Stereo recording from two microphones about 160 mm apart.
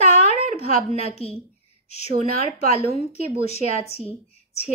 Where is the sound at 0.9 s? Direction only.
40° left (ahead or behind).